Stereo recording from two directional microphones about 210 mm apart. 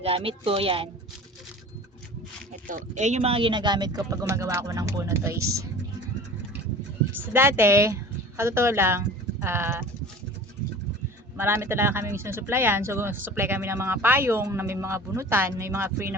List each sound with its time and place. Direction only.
0.0 s speech: 25° right (ahead or behind)
2.6 s speech: 35° right (ahead or behind); by 5.5 s 15° right (ahead or behind)
7.1 s a woman's voice: 10° right (ahead or behind)
11.3 s speech: 10° right (ahead or behind)